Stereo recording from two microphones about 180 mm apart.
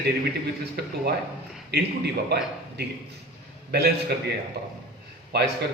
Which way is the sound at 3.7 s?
60° right (ahead or behind).